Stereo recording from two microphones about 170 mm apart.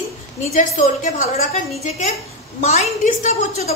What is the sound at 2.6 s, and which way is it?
A woman's voice, 40° left (ahead or behind).